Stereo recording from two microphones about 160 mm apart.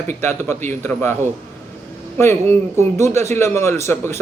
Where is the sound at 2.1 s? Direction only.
15° left (ahead or behind).